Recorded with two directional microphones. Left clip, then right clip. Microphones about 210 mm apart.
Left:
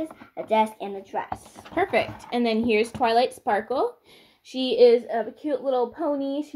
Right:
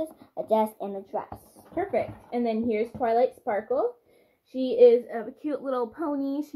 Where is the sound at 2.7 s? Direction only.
65° left (ahead or behind).